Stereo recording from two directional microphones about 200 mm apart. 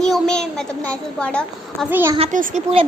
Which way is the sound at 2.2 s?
40° right (ahead or behind).